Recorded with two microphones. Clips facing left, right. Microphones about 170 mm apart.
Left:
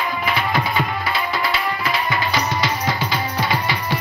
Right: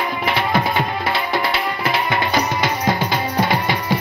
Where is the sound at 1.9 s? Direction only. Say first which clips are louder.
Right 4 dB; 60° right (ahead or behind).